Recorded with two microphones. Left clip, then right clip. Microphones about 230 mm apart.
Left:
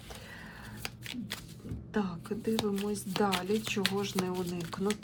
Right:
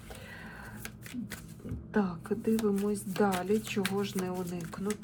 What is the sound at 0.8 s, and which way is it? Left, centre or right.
Shuffling cards, centre.